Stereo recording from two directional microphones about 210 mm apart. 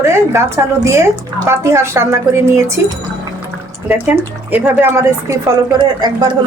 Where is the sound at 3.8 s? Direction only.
10° right (ahead or behind).